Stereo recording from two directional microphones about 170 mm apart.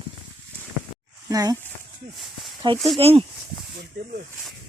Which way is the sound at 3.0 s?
35° right (ahead or behind).